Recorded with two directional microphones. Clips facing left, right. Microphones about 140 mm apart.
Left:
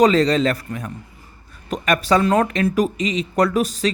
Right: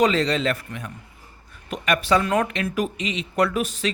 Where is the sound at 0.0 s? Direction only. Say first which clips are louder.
Left 5 dB; 40° left (ahead or behind).